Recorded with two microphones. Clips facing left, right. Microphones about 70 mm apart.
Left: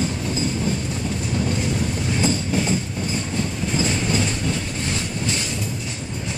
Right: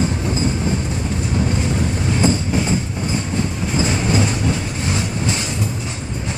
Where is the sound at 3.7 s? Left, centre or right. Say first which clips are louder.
Right 4 dB; right.